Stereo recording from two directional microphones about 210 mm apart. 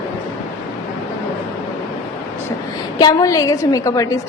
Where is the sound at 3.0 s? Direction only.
20° left (ahead or behind).